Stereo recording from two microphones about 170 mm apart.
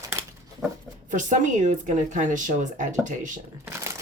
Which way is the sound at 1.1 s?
45° right (ahead or behind).